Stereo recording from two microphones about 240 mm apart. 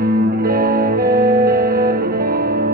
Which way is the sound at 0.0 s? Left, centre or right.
Right.